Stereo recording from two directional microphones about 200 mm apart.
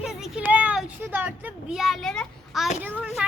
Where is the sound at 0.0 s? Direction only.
5° right (ahead or behind).